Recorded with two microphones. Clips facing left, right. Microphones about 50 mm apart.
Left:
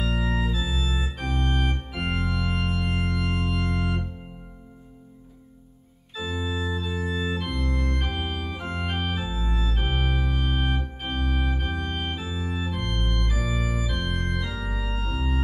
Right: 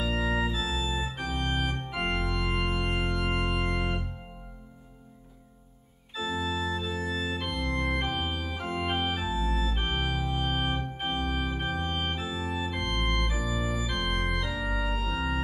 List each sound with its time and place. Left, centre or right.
0.0 s organ: centre
6.1 s organ: centre
7.7 s organ: right
8.0 s organ: centre
13.5 s organ: centre